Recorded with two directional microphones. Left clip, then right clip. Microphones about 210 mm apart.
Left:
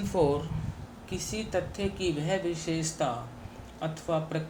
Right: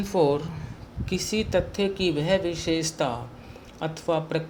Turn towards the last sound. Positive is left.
turn(degrees=-50)  # may be behind; listen again after turning